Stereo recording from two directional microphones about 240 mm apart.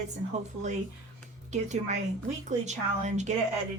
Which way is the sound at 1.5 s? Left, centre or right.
Right.